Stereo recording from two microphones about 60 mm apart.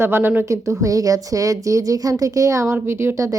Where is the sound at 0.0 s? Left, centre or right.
Right.